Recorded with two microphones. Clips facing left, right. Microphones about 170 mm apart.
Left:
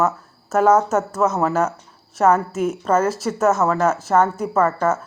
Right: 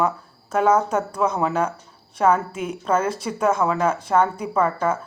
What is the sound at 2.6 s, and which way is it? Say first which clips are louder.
A woman's voice: left 4 dB; 5° left (ahead or behind).